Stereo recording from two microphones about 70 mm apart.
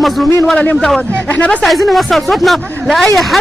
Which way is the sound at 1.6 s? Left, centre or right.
Centre.